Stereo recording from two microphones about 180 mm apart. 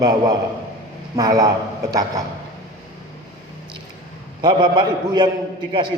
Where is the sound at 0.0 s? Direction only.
20° right (ahead or behind).